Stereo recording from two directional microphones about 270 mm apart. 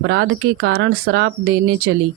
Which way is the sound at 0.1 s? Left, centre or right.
Right.